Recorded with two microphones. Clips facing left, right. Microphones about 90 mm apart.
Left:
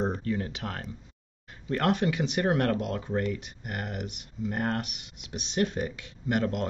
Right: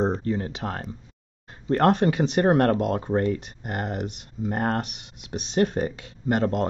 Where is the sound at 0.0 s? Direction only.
30° right (ahead or behind).